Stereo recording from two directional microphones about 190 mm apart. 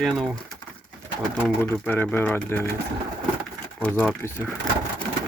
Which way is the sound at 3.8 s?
5° left (ahead or behind).